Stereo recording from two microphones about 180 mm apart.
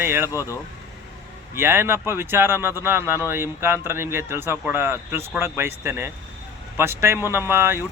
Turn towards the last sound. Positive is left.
turn(degrees=-15)  # may be behind; listen again after turning